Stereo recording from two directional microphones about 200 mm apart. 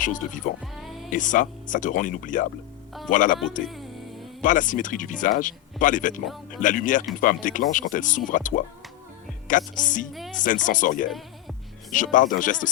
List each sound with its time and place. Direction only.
0.0 s speech: 40° left (ahead or behind)
0.6 s music: centre (ahead or behind)
1.1 s speech: 40° left (ahead or behind)
4.4 s speech: 40° left (ahead or behind)
10.1 s speech: centre (ahead or behind)
10.3 s speech: 40° left (ahead or behind)